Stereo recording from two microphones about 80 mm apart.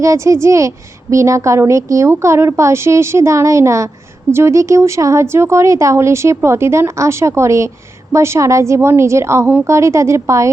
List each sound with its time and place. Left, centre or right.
0.0 s a woman's voice: right